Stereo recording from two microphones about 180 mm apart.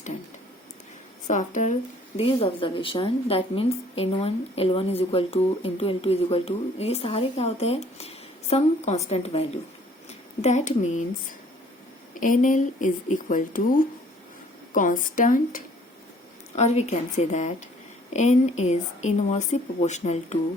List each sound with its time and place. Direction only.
1.3 s speech: 45° left (ahead or behind)
2.1 s speech: 35° left (ahead or behind)
12.2 s speech: 45° left (ahead or behind)